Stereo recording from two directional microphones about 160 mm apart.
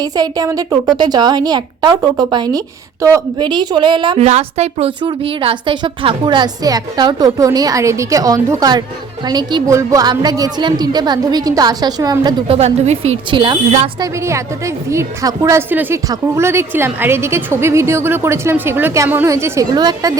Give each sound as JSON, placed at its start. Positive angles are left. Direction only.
{"t": 0.0, "sound": "a woman's voice", "side_deg": -25}
{"t": 4.3, "sound": "a woman's voice", "side_deg": -40}
{"t": 12.5, "sound": "a woman's voice", "side_deg": -45}
{"t": 13.3, "sound": "a woman's voice", "side_deg": -30}
{"t": 14.0, "sound": "a woman's voice", "side_deg": -20}